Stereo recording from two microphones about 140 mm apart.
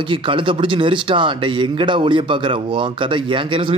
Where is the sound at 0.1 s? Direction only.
35° right (ahead or behind).